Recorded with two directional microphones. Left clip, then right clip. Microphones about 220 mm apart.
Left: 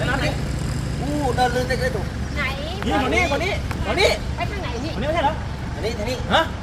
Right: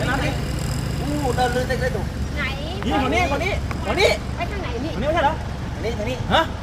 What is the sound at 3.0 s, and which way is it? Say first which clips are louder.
Speech: even; 5° right (ahead or behind).